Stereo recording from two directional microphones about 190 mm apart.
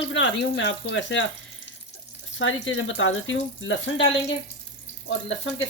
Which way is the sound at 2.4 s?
90° left.